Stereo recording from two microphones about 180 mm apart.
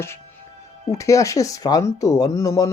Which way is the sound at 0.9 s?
15° left (ahead or behind).